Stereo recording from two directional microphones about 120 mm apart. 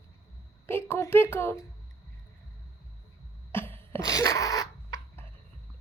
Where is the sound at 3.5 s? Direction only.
20° left (ahead or behind).